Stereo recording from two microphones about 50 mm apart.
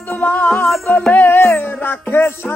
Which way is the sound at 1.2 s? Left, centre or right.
Left.